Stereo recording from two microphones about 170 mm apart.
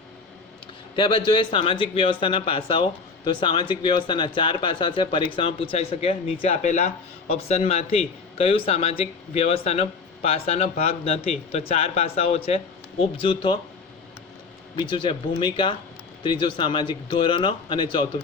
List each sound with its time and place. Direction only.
0.9 s a man's voice: 30° left (ahead or behind)
6.5 s a man's voice: 45° left (ahead or behind); by 13.6 s 30° left (ahead or behind)
14.8 s speech: 30° left (ahead or behind)